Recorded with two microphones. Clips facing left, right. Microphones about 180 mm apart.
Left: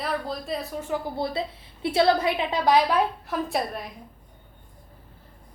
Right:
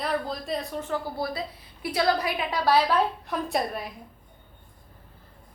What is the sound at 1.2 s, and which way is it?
A woman's voice, 25° left (ahead or behind).